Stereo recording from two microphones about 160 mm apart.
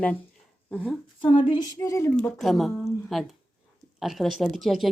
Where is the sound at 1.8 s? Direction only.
20° left (ahead or behind).